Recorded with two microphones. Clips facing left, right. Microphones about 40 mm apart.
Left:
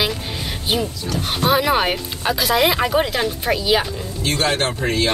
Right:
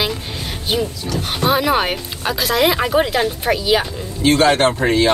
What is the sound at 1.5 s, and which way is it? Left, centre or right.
Speech, centre.